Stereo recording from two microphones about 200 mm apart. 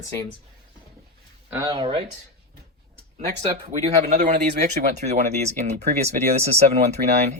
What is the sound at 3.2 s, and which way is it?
Speech, 35° right (ahead or behind).